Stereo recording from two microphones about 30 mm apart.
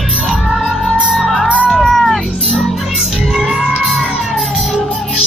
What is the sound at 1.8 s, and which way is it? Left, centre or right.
Music, centre.